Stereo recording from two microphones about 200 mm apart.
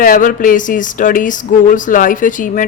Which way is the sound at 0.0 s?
40° left (ahead or behind).